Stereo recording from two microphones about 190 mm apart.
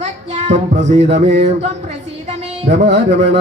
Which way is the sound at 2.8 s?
35° right (ahead or behind).